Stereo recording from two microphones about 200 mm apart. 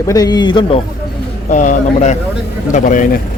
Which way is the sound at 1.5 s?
35° left (ahead or behind).